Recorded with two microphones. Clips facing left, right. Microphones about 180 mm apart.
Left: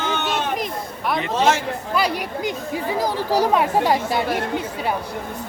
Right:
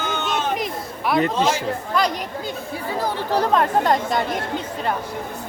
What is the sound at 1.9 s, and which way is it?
Speech, 10° left (ahead or behind).